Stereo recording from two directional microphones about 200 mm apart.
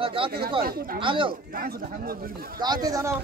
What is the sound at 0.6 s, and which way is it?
Speech, 45° right (ahead or behind).